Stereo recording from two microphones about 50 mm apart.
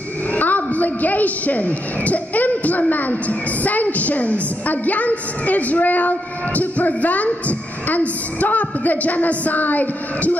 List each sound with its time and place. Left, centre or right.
0.3 s a woman's voice: left